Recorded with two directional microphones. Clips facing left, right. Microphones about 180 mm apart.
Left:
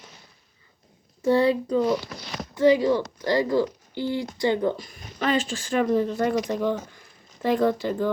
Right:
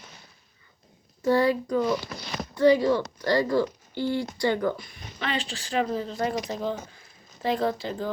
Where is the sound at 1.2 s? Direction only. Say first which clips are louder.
Left 2 dB; 25° left (ahead or behind).